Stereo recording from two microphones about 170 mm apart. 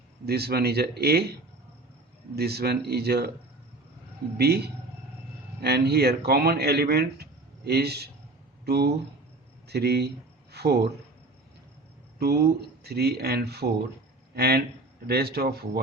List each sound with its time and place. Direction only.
0.3 s a man's voice: 70° right (ahead or behind)
4.4 s a man's voice: 70° right (ahead or behind)
12.2 s a man's voice: 70° right (ahead or behind)